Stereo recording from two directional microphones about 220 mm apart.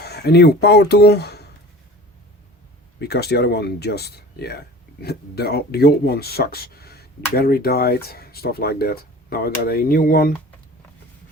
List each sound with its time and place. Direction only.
0.0 s speech: 50° left (ahead or behind)
3.0 s speech: 50° left (ahead or behind)